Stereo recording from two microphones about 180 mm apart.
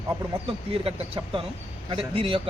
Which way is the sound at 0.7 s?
30° right (ahead or behind).